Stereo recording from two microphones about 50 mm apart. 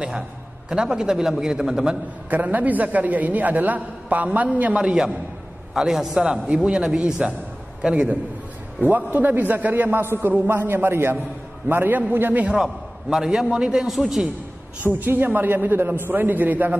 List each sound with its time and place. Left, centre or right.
0.7 s a man's voice: centre
2.2 s a man's voice: right
4.7 s a man's voice: centre
6.4 s a man's voice: right
8.8 s a man's voice: right
10.0 s a man's voice: right
12.4 s a man's voice: centre
13.8 s a man's voice: centre
14.8 s a man's voice: right